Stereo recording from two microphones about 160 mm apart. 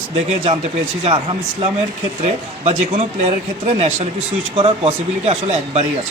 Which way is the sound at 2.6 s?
45° right (ahead or behind).